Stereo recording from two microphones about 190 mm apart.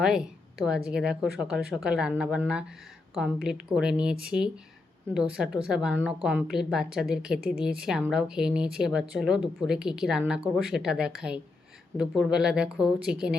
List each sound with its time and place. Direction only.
0.0 s a woman's voice: 5° right (ahead or behind)